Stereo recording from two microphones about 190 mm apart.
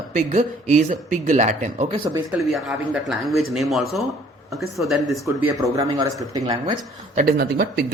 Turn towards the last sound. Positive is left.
turn(degrees=-55)  # may be behind; listen again after turning